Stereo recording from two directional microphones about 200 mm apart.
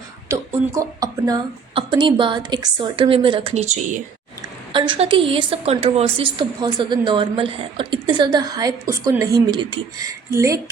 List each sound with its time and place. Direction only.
0.3 s a woman's voice: 15° right (ahead or behind); by 4.0 s 35° right (ahead or behind)
4.7 s a woman's voice: 25° right (ahead or behind)